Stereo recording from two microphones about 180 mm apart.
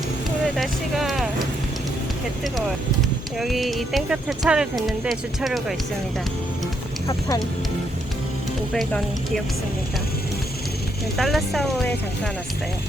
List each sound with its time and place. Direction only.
0.5 s a sound: centre (ahead or behind)
3.3 s speech: centre (ahead or behind)
7.1 s speech: 20° left (ahead or behind)
8.7 s speech: centre (ahead or behind)
11.2 s speech: centre (ahead or behind)